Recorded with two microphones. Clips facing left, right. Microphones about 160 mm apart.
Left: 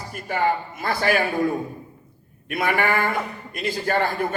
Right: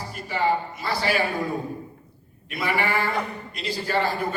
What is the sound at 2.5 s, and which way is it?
A man's voice, 50° left (ahead or behind).